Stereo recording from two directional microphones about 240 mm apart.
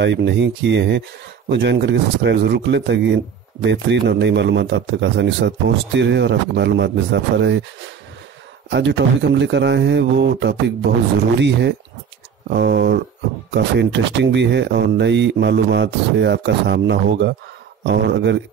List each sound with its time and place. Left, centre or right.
0.0 s speech: right
8.6 s speech: right